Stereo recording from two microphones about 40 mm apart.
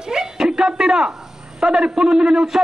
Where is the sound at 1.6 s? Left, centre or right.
Right.